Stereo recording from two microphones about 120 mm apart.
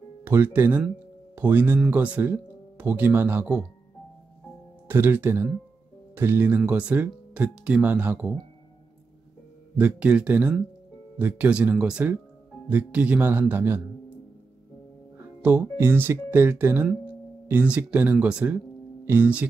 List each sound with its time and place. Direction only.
0.2 s speech: 20° right (ahead or behind)
4.8 s speech: 15° right (ahead or behind)
9.8 s speech: 10° right (ahead or behind)
15.1 s speech: 15° right (ahead or behind)